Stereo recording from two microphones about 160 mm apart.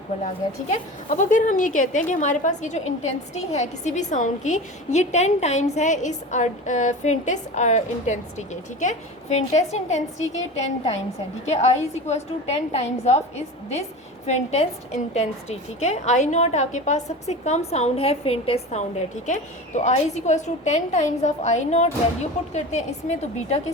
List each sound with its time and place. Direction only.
0.7 s a woman's voice: 50° left (ahead or behind)
11.4 s a woman's voice: 40° left (ahead or behind)